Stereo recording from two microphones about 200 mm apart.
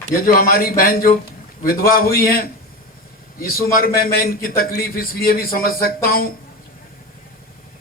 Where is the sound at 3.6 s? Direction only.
45° left (ahead or behind).